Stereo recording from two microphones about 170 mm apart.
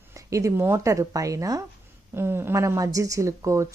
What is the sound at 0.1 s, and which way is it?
Speech, 20° right (ahead or behind).